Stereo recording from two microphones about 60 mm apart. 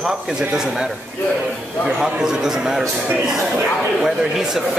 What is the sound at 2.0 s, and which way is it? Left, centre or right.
Speech, centre.